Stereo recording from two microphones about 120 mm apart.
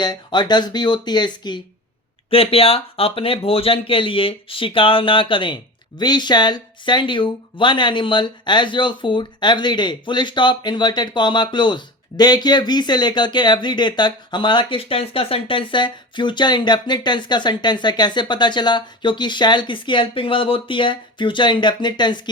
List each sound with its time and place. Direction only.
0.0 s speech: 35° left (ahead or behind)
2.3 s speech: 50° left (ahead or behind)